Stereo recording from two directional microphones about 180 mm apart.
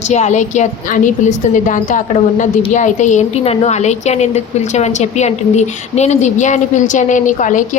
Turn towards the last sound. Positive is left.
turn(degrees=45)  # may be behind; listen again after turning